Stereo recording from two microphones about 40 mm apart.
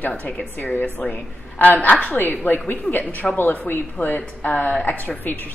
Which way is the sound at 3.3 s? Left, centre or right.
Left.